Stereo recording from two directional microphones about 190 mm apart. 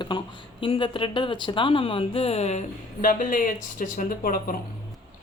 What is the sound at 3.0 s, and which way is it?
Speech, 45° left (ahead or behind).